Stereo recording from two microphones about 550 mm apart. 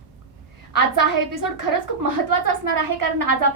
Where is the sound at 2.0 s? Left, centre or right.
Right.